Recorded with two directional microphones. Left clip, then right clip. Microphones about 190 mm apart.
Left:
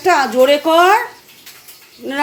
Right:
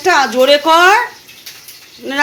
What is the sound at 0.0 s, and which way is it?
Speech, 15° left (ahead or behind).